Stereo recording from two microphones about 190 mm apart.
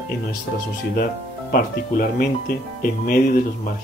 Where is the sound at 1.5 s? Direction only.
50° left (ahead or behind).